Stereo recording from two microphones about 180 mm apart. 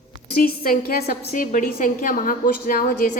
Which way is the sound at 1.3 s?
45° left (ahead or behind).